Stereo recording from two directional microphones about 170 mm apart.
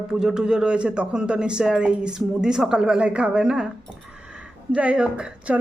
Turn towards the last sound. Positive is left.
turn(degrees=-5)  # may be behind; listen again after turning